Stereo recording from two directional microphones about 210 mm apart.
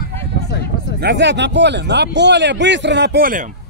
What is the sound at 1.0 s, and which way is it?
Speech, 55° right (ahead or behind).